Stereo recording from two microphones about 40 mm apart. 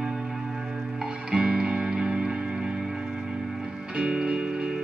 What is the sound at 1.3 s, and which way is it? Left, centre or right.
Music, right.